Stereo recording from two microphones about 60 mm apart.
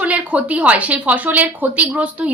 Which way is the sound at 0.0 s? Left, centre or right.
Right.